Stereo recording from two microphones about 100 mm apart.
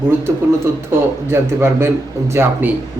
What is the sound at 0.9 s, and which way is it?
A man's voice, 20° right (ahead or behind).